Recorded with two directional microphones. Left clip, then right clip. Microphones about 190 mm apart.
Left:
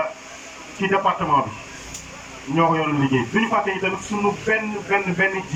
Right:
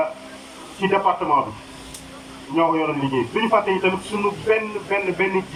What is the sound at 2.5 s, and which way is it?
Speech, 20° right (ahead or behind).